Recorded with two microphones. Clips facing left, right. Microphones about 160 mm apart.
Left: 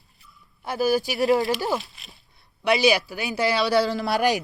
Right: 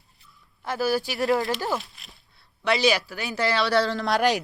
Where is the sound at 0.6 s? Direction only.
15° left (ahead or behind).